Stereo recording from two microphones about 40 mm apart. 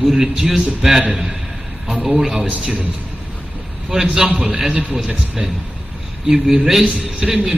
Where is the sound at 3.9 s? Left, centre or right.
Centre.